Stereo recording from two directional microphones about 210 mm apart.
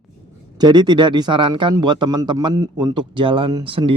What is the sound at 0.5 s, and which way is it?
A man's voice, 20° right (ahead or behind).